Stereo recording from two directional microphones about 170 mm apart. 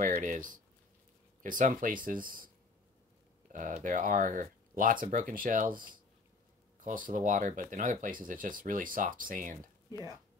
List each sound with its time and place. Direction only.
0.0 s speech: 50° right (ahead or behind)
3.5 s speech: 50° right (ahead or behind)